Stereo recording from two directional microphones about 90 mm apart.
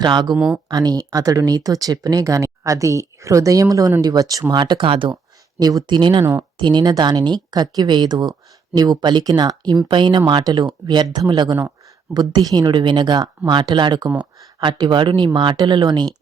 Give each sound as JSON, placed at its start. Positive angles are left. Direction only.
{"t": 0.0, "sound": "speech", "side_deg": -55}
{"t": 0.3, "sound": "speech", "side_deg": -15}
{"t": 0.7, "sound": "speech", "side_deg": -45}
{"t": 4.5, "sound": "speech", "side_deg": -60}
{"t": 5.5, "sound": "speech", "side_deg": -50}